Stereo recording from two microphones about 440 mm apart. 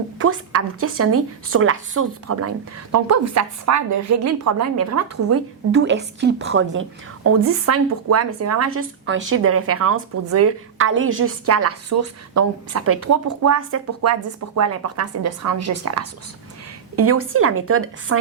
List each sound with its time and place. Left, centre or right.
0.2 s a woman's voice: right